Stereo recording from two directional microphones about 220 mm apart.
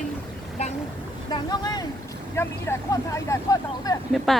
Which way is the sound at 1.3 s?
20° left (ahead or behind).